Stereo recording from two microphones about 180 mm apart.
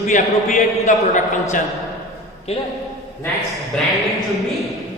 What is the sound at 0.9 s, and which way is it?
A man's voice, 40° left (ahead or behind).